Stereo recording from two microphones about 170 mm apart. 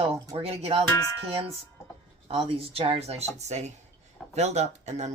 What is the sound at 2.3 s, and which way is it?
Speech, 35° right (ahead or behind).